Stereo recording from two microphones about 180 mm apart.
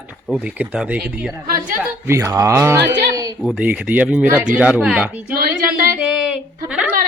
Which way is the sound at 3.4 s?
5° right (ahead or behind).